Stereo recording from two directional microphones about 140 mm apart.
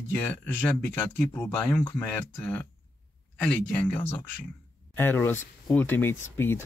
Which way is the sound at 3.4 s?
10° left (ahead or behind).